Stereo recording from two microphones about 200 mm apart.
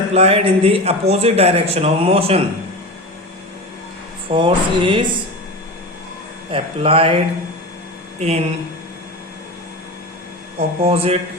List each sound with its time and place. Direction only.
0.1 s speech: 30° right (ahead or behind)
4.3 s speech: 25° right (ahead or behind)
6.5 s speech: 25° right (ahead or behind)
8.2 s speech: 30° right (ahead or behind)
10.6 s speech: 30° right (ahead or behind)